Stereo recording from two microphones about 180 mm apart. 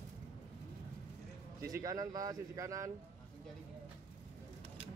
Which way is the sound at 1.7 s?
20° right (ahead or behind).